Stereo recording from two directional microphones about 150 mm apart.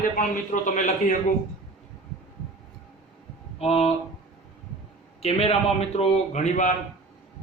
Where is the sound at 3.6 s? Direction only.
45° left (ahead or behind).